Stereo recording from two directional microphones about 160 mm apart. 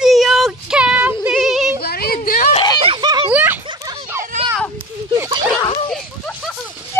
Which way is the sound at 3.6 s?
25° right (ahead or behind).